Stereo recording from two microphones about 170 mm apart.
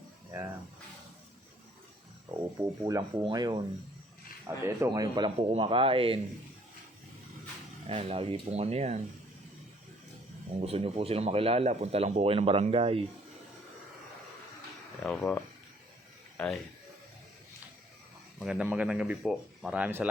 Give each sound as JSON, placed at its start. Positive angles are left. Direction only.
{"t": 2.6, "sound": "speech", "side_deg": -20}
{"t": 5.1, "sound": "speech", "side_deg": -30}
{"t": 7.9, "sound": "speech", "side_deg": -35}
{"t": 10.6, "sound": "speech", "side_deg": -35}
{"t": 15.0, "sound": "speech", "side_deg": 5}
{"t": 18.3, "sound": "speech", "side_deg": -5}